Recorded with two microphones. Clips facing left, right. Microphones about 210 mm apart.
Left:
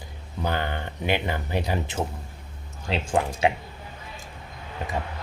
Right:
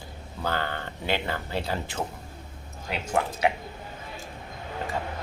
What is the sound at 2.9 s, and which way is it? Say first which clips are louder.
Speech: left 3 dB; 25° left (ahead or behind).